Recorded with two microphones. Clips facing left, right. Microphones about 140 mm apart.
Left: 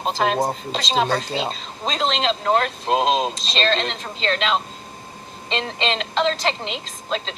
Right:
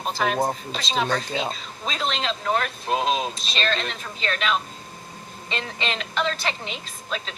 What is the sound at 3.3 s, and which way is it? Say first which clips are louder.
Speech: left 3 dB; 90° left.